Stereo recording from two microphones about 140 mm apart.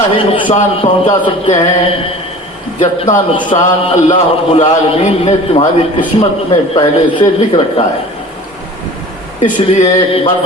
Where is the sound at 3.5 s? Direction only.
45° left (ahead or behind).